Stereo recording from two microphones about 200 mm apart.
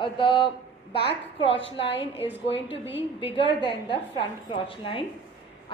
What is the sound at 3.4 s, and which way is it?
A woman's voice, 25° left (ahead or behind).